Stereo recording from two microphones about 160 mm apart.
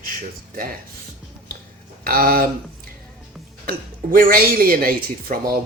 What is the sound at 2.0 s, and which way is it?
Speech, 65° right (ahead or behind).